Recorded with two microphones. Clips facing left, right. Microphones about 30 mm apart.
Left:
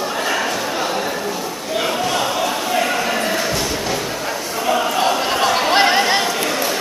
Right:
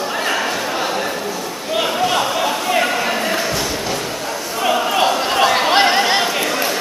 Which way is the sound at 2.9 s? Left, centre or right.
Centre.